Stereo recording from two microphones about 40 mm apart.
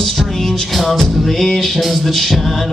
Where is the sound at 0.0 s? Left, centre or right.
Centre.